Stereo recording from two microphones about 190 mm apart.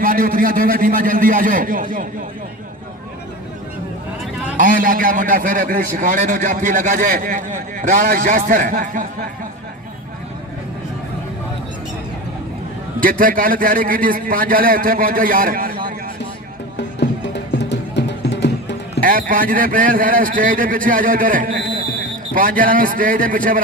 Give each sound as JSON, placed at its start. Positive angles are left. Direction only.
{"t": 0.0, "sound": "a man's voice", "side_deg": -45}
{"t": 4.5, "sound": "a man's voice", "side_deg": -45}
{"t": 13.0, "sound": "a man's voice", "side_deg": -45}
{"t": 16.7, "sound": "music", "side_deg": 65}
{"t": 19.0, "sound": "a man's voice", "side_deg": -45}